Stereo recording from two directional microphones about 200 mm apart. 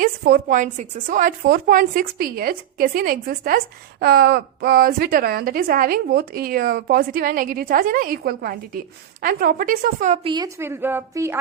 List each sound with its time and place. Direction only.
0.0 s a woman's voice: 45° right (ahead or behind)
10.2 s a woman's voice: 20° right (ahead or behind)